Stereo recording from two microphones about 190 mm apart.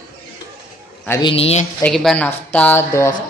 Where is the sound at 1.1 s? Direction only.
25° left (ahead or behind).